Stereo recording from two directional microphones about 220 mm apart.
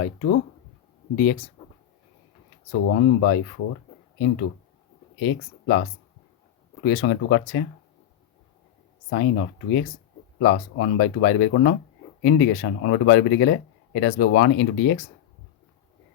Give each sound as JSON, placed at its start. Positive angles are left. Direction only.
{"t": 0.0, "sound": "speech", "side_deg": 50}
{"t": 2.8, "sound": "speech", "side_deg": 65}
{"t": 5.2, "sound": "speech", "side_deg": 55}
{"t": 6.8, "sound": "speech", "side_deg": 50}
{"t": 9.0, "sound": "speech", "side_deg": 55}